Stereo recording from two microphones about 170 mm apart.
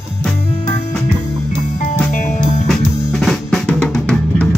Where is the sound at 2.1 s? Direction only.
45° left (ahead or behind).